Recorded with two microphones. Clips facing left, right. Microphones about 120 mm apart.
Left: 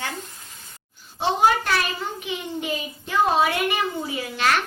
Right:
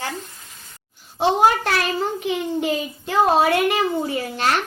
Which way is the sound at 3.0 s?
40° right (ahead or behind).